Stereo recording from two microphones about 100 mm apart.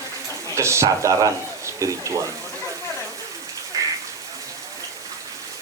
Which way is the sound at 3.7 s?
35° right (ahead or behind).